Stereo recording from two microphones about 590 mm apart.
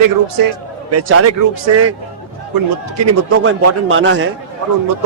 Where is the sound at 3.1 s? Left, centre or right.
Right.